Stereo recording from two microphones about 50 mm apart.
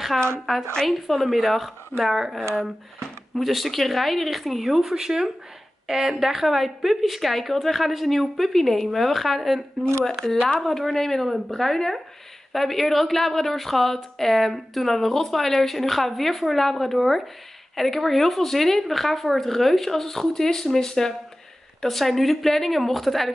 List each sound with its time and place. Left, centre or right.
0.5 s a woman's voice: centre
2.5 s a woman's voice: centre